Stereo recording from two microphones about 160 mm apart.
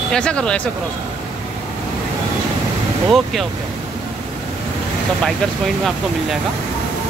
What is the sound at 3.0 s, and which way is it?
Speech, centre (ahead or behind).